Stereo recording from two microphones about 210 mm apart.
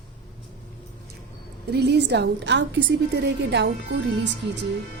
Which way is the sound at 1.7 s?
55° right (ahead or behind).